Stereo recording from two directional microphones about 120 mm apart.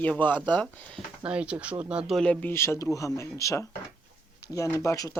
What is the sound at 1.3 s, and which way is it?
Speech, 10° right (ahead or behind).